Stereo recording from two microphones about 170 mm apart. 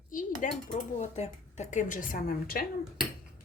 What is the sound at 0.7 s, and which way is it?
Speech, 40° left (ahead or behind).